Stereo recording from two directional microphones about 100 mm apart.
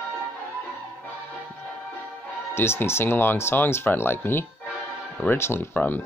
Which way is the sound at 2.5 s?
25° left (ahead or behind).